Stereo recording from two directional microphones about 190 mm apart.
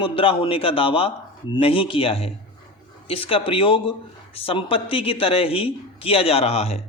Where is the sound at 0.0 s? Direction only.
25° left (ahead or behind).